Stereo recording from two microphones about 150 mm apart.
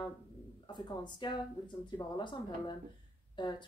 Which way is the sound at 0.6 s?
30° left (ahead or behind).